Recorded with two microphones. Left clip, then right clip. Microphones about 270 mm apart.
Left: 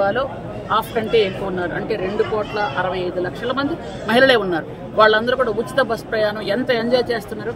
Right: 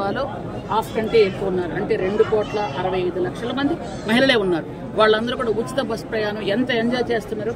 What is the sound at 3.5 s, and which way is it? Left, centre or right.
A man's voice, centre.